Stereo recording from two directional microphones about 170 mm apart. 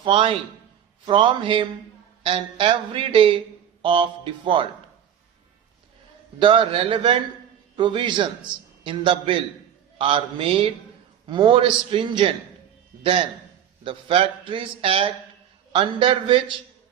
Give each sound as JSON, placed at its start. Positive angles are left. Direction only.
{"t": 0.0, "sound": "a man's voice", "side_deg": -30}
{"t": 6.4, "sound": "a man's voice", "side_deg": -30}